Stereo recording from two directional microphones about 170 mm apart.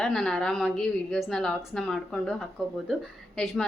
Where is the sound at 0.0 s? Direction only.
5° left (ahead or behind).